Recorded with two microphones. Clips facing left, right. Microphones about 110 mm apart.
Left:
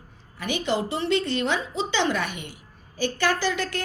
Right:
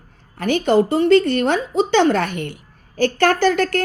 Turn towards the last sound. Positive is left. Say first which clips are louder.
# right 9 dB
turn(degrees=-55)  # may be behind; listen again after turning